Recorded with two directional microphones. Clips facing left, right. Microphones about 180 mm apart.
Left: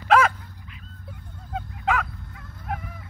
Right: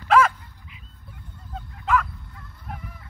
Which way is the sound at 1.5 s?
90° left.